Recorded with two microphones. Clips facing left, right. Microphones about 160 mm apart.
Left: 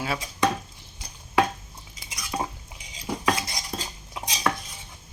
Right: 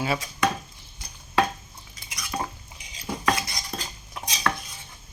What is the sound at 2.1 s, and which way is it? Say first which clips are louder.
Cutlery: left 1 dB; 15° left (ahead or behind).